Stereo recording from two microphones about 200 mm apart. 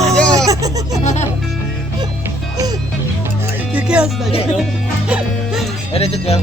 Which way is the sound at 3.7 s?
5° right (ahead or behind).